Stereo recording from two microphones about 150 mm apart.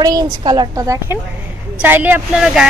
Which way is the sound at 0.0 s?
25° right (ahead or behind).